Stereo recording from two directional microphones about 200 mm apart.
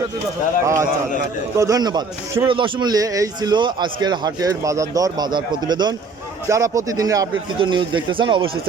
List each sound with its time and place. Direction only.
0.6 s a man's voice: 15° right (ahead or behind)